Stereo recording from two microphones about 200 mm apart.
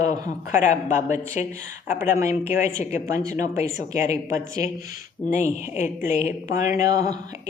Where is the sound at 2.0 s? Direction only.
15° right (ahead or behind).